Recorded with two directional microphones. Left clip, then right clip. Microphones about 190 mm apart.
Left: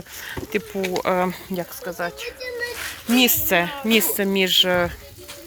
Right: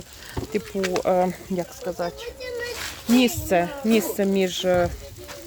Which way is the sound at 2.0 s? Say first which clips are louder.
Left 1 dB; 10° right (ahead or behind).